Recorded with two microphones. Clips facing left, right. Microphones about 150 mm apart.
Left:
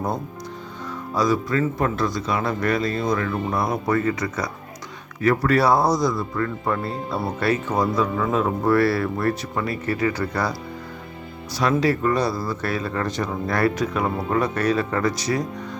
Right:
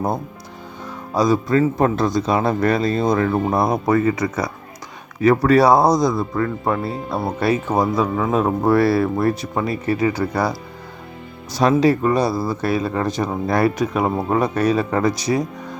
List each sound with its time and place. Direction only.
1.1 s speech: 20° right (ahead or behind); by 3.6 s 40° right (ahead or behind)
3.6 s speech: 20° right (ahead or behind)
11.8 s speech: 20° right (ahead or behind)